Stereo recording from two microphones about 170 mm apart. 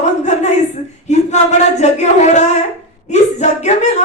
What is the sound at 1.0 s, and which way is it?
Speech, 45° left (ahead or behind).